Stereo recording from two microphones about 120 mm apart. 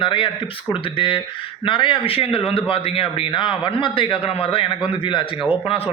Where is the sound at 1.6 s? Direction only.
45° left (ahead or behind).